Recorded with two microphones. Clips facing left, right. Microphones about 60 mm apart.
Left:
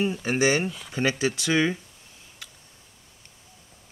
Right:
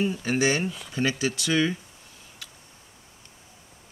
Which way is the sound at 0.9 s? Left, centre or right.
Left.